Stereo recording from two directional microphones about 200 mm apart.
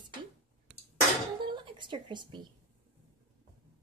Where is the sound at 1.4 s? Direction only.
25° right (ahead or behind).